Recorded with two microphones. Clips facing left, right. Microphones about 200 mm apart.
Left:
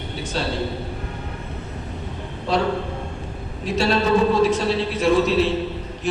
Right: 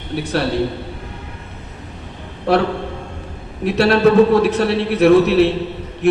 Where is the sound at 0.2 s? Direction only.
65° right (ahead or behind).